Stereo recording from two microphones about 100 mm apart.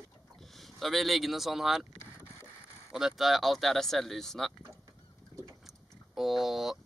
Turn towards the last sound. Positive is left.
turn(degrees=-5)  # may be behind; listen again after turning